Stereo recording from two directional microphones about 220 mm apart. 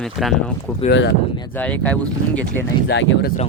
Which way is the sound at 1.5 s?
5° left (ahead or behind).